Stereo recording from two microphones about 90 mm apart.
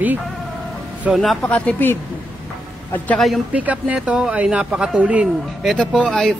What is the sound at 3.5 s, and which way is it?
Speech, 15° right (ahead or behind).